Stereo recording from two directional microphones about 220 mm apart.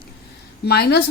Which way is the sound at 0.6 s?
45° left (ahead or behind).